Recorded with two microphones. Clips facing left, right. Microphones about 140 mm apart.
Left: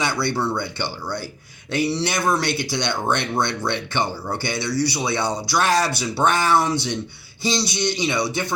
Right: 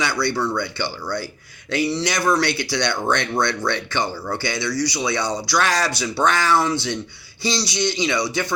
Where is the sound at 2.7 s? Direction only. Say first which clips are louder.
Right 1 dB; 20° left (ahead or behind).